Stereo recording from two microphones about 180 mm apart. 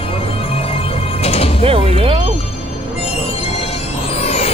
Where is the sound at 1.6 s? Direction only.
30° right (ahead or behind).